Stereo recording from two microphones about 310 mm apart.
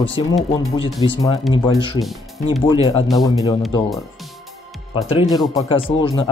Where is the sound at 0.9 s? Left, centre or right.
Centre.